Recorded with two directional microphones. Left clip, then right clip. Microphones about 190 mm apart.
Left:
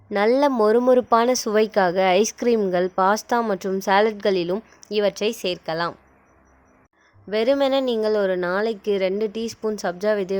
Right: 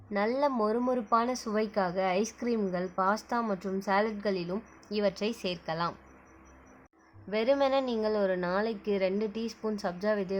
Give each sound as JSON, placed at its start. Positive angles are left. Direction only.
{"t": 0.1, "sound": "speech", "side_deg": 45}
{"t": 7.3, "sound": "a woman's voice", "side_deg": 35}